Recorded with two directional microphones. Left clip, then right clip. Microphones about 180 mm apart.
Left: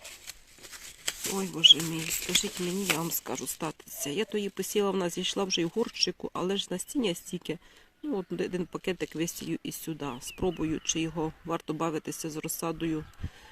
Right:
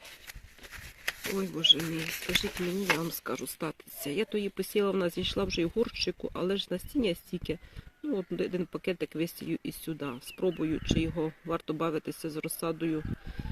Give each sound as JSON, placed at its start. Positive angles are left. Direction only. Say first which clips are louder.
{"t": 0.3, "sound": "shuffling cards", "louder": "left 1 dB", "side_deg": 30}
{"t": 1.4, "sound": "speech", "louder": "left 5 dB", "side_deg": 0}
{"t": 2.3, "sound": "speech", "louder": "left 1 dB", "side_deg": 30}
{"t": 3.0, "sound": "speech", "louder": "left 1 dB", "side_deg": 0}